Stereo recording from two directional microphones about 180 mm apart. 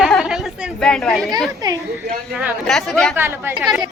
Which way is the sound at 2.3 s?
10° right (ahead or behind).